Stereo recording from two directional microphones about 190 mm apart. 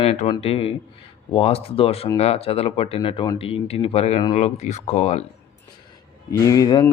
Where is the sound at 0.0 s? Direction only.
35° left (ahead or behind).